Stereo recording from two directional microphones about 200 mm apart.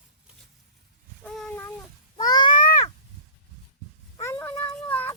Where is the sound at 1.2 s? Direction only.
5° left (ahead or behind).